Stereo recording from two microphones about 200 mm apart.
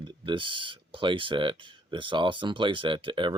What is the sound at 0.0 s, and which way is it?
Speech, 25° right (ahead or behind).